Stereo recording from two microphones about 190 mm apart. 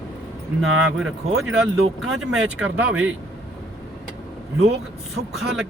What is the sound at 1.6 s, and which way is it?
Speech, 5° right (ahead or behind).